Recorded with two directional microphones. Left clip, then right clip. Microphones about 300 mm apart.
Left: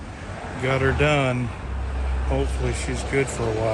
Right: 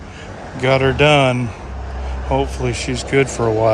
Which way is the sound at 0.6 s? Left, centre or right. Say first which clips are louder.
Right 8 dB; right.